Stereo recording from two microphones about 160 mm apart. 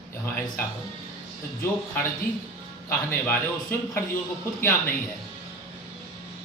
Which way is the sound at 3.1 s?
15° left (ahead or behind).